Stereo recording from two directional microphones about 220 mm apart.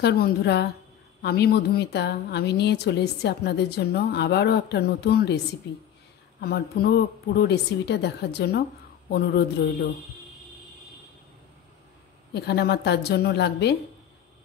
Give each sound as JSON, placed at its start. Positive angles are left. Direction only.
{"t": 0.0, "sound": "a woman's voice", "side_deg": 45}
{"t": 6.4, "sound": "a woman's voice", "side_deg": 45}
{"t": 12.4, "sound": "a woman's voice", "side_deg": 50}